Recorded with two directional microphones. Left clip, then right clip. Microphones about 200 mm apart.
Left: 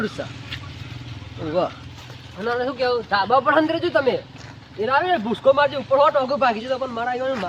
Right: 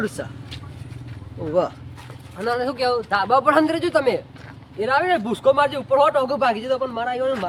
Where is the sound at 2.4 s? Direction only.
25° right (ahead or behind).